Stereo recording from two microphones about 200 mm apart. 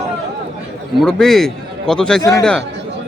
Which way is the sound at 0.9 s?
Centre (ahead or behind).